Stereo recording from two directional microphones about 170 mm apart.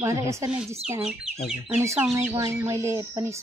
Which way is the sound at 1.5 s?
10° right (ahead or behind).